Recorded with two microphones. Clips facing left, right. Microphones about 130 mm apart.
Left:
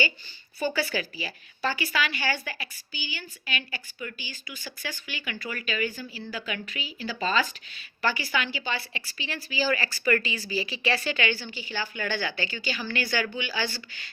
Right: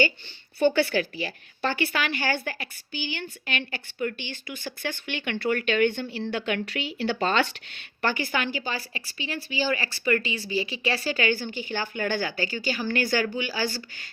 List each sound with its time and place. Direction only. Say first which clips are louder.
0.6 s speech: right 6 dB; 60° right (ahead or behind); by 14.1 s 45° right (ahead or behind)